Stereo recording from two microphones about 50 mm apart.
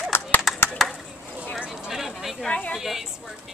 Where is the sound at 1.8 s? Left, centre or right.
Centre.